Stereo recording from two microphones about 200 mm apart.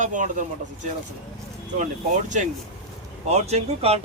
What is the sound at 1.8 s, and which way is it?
Speech, 40° right (ahead or behind).